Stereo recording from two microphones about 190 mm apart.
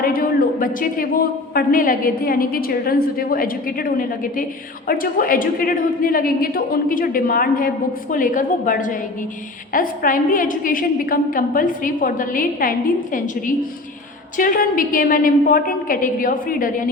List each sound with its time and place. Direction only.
0.0 s a man's voice: 50° left (ahead or behind)